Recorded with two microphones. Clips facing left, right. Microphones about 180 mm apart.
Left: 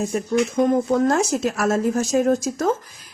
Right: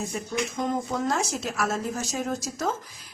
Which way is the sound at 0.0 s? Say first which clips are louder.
Left 9 dB; 55° left (ahead or behind).